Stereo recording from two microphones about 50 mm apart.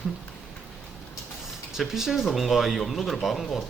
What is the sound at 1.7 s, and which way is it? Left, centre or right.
Speech, centre.